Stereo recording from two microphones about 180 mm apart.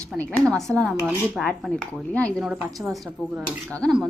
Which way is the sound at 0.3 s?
Centre (ahead or behind).